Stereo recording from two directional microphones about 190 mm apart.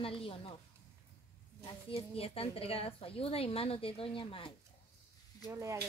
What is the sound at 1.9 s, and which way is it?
A woman's voice, 30° left (ahead or behind).